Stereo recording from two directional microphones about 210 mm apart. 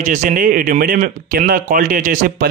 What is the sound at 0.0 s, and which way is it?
A man's voice, 40° right (ahead or behind).